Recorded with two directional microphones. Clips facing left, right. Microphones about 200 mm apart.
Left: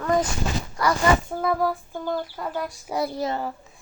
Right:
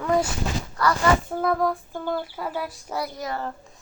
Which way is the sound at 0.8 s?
15° left (ahead or behind).